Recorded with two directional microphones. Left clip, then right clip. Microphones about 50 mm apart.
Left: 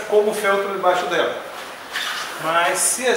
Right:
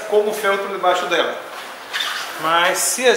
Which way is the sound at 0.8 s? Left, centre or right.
Centre.